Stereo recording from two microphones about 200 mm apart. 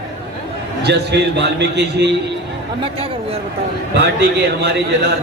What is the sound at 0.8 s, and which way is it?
A man's voice, 55° right (ahead or behind).